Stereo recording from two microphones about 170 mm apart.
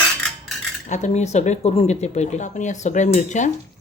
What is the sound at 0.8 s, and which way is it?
Speech, 45° left (ahead or behind).